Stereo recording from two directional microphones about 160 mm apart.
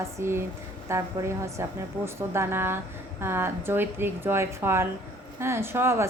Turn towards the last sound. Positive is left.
turn(degrees=-15)  # may be behind; listen again after turning